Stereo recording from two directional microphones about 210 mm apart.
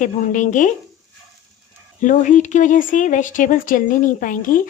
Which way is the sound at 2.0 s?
35° left (ahead or behind).